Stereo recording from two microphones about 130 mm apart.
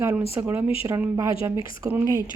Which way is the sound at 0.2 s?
20° right (ahead or behind).